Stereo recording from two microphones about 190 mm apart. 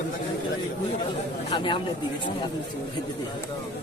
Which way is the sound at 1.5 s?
25° left (ahead or behind).